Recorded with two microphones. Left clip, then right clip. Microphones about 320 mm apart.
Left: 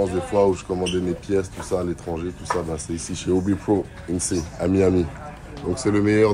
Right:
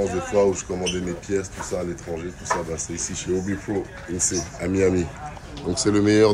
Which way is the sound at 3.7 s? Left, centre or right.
Left.